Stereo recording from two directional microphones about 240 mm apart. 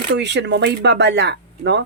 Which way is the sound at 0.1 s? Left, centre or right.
Right.